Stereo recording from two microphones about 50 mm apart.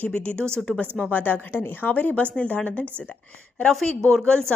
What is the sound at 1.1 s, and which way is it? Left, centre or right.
Speech, left.